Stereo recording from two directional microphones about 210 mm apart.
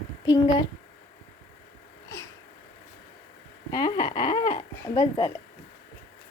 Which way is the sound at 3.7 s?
20° left (ahead or behind).